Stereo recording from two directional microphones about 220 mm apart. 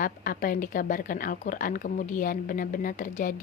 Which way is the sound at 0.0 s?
40° left (ahead or behind).